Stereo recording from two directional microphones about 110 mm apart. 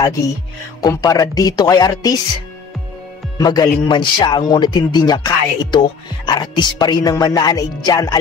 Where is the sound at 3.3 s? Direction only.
35° left (ahead or behind).